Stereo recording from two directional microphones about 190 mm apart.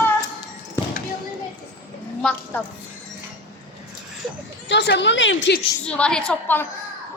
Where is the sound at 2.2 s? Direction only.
5° left (ahead or behind).